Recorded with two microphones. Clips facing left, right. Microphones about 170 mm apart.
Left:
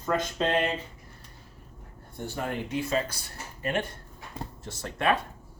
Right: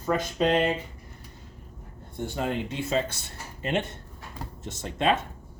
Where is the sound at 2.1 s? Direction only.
20° right (ahead or behind).